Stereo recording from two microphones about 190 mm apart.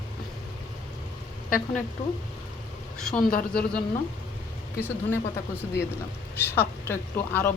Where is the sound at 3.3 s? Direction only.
50° left (ahead or behind).